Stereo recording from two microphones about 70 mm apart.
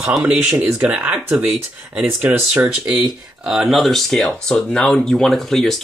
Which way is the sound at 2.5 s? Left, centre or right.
Centre.